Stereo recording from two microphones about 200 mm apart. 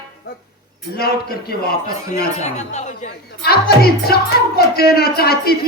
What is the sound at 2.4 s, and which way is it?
Speech, 35° left (ahead or behind).